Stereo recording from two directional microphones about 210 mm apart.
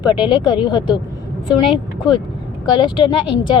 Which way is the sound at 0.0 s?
20° left (ahead or behind).